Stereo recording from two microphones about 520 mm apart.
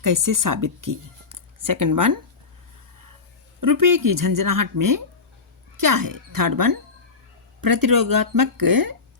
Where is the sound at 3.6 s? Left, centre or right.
Right.